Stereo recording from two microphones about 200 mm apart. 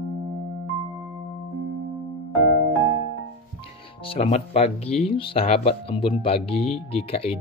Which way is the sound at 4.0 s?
30° left (ahead or behind).